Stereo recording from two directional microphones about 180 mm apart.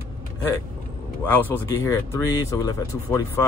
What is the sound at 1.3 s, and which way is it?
Speech, 10° left (ahead or behind).